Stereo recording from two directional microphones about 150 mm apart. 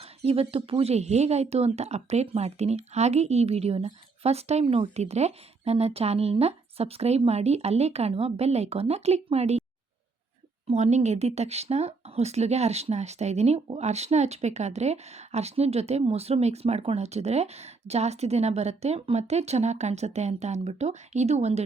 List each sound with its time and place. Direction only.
0.0 s speech: 40° right (ahead or behind)
10.7 s speech: 50° right (ahead or behind)